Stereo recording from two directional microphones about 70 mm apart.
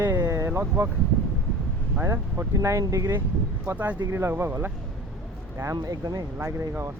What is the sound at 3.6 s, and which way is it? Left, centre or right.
Speech, right.